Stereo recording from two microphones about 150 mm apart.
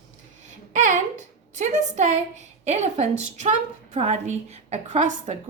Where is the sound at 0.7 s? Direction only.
55° right (ahead or behind).